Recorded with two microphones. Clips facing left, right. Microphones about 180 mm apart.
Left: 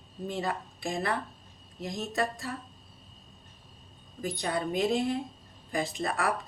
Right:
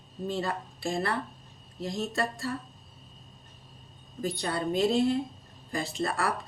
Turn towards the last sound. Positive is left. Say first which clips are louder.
# even
turn(degrees=15)  # may be behind; listen again after turning